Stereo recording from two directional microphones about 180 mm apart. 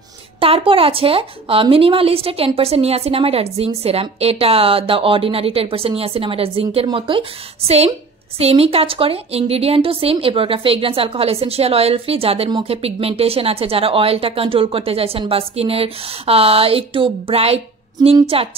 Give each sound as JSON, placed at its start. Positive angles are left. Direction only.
{"t": 0.4, "sound": "a woman's voice", "side_deg": -30}